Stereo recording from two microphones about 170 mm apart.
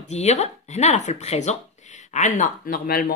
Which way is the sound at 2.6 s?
60° left (ahead or behind).